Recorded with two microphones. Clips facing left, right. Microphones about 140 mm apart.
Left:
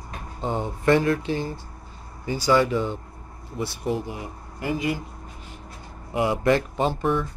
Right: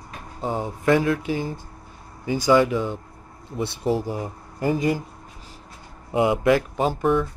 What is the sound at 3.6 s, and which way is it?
Speech, 30° right (ahead or behind).